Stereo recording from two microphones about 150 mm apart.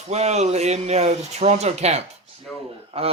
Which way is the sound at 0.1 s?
50° right (ahead or behind).